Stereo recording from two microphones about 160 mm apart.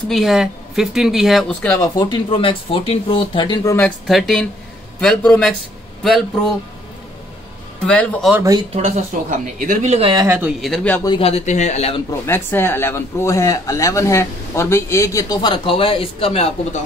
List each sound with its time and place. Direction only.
0.1 s speech: centre (ahead or behind)
1.8 s speech: 25° left (ahead or behind)
3.7 s speech: 5° left (ahead or behind)
7.8 s speech: 5° left (ahead or behind)
8.4 s speech: 20° right (ahead or behind)
8.7 s speech: 45° right (ahead or behind)
10.1 s speech: 15° right (ahead or behind)
10.6 s speech: 5° left (ahead or behind)
11.1 s speech: 35° left (ahead or behind)
12.1 s speech: 15° left (ahead or behind); by 16.5 s 40° left (ahead or behind)